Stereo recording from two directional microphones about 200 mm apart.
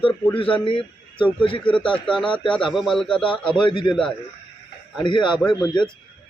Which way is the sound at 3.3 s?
25° left (ahead or behind).